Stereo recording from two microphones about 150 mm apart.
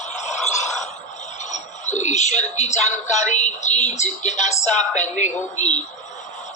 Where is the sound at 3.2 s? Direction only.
50° left (ahead or behind).